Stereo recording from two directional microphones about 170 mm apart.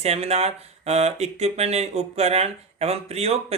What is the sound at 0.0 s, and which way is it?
Speech, 40° right (ahead or behind).